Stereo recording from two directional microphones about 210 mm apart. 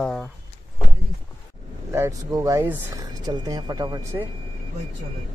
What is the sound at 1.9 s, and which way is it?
Speech, 15° right (ahead or behind).